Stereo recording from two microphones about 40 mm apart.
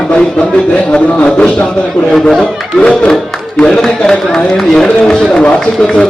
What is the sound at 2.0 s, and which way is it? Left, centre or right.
A man's voice, centre.